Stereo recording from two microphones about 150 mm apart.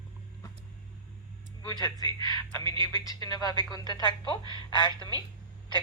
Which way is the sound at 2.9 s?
25° left (ahead or behind).